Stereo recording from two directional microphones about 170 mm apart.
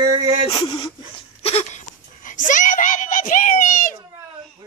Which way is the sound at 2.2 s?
50° left (ahead or behind).